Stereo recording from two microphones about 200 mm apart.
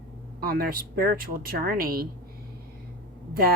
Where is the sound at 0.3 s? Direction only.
50° right (ahead or behind).